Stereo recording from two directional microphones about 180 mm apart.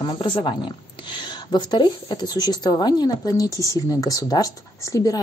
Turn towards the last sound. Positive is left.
turn(degrees=20)  # may be behind; listen again after turning